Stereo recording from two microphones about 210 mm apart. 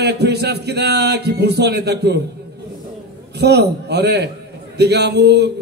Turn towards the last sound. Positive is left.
turn(degrees=-50)  # may be behind; listen again after turning